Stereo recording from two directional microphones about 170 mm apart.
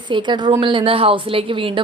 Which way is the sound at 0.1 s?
25° right (ahead or behind).